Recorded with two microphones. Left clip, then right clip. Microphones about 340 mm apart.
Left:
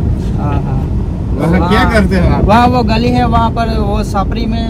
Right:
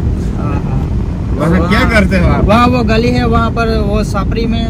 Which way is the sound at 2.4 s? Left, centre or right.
Right.